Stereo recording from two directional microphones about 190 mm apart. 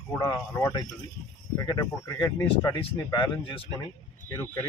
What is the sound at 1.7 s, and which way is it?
A man's voice, 15° left (ahead or behind).